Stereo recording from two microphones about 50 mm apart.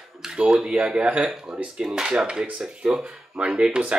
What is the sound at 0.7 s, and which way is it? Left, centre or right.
Speech, right.